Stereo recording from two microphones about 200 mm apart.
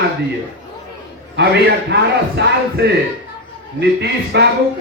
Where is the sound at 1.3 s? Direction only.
55° right (ahead or behind).